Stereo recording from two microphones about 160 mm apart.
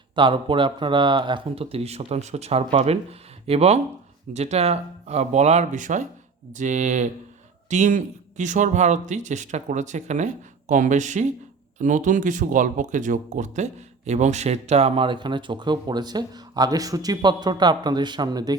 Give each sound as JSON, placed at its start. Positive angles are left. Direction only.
{"t": 0.2, "sound": "speech", "side_deg": -30}